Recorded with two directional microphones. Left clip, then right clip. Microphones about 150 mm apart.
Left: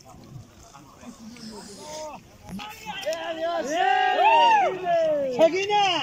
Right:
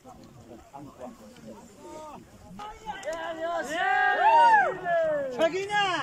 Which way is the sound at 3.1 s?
30° left (ahead or behind).